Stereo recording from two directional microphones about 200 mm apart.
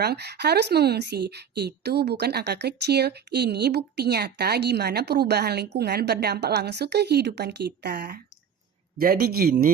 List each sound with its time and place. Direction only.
0.0 s a woman's voice: 55° right (ahead or behind)